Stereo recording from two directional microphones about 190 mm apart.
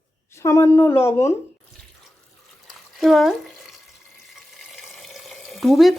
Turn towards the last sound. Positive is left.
turn(degrees=0)  # may be behind; listen again after turning